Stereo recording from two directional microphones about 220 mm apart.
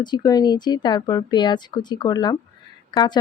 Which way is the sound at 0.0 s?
20° left (ahead or behind).